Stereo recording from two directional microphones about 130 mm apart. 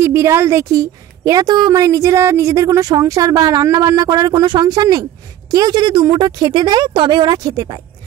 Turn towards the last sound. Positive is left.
turn(degrees=-30)  # may be behind; listen again after turning